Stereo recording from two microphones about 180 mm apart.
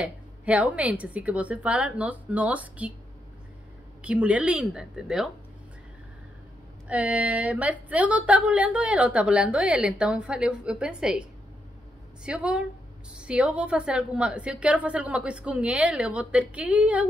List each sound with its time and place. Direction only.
0.0 s a woman's voice: 5° right (ahead or behind)
4.0 s speech: 5° right (ahead or behind)
6.9 s a woman's voice: 5° right (ahead or behind)
12.3 s a woman's voice: 5° right (ahead or behind)